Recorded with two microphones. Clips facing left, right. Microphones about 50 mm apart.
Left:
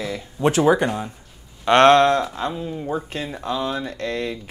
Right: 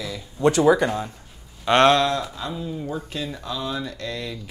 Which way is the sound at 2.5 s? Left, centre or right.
Left.